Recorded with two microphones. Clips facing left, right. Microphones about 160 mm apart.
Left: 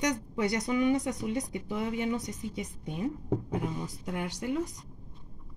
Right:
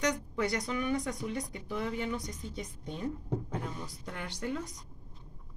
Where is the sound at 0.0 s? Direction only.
20° left (ahead or behind).